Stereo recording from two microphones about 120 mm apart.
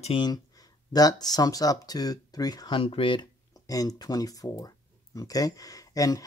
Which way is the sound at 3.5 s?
30° left (ahead or behind).